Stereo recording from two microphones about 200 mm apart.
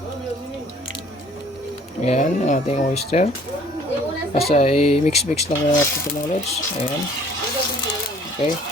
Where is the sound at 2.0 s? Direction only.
35° left (ahead or behind).